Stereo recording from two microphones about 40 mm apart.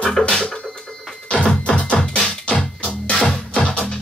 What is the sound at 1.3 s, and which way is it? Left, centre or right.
Music, left.